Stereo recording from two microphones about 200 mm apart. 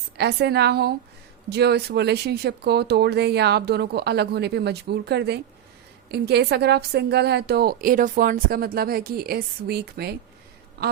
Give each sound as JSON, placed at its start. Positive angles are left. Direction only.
{"t": 0.2, "sound": "a woman's voice", "side_deg": -55}